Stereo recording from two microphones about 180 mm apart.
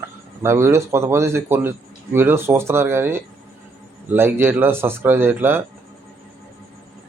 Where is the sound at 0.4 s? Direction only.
15° right (ahead or behind).